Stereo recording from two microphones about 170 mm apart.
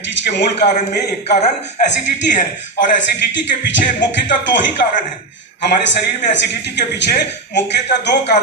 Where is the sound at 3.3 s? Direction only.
90° left.